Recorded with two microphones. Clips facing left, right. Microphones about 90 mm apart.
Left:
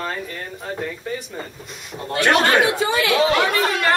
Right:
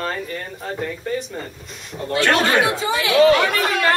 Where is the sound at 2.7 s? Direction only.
55° left (ahead or behind).